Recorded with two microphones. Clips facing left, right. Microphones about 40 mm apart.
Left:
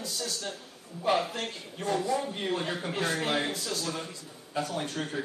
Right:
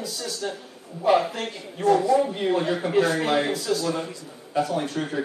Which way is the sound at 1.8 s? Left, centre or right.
Right.